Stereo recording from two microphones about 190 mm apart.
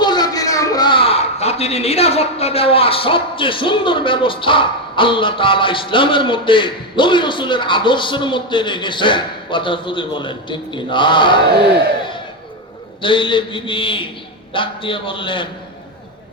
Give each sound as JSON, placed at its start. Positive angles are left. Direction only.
{"t": 0.0, "sound": "a man's voice", "side_deg": 20}
{"t": 13.0, "sound": "a man's voice", "side_deg": 25}